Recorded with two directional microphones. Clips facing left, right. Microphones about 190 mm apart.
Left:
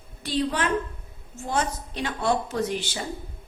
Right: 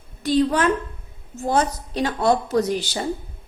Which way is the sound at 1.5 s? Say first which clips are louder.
Right 6 dB; 35° right (ahead or behind).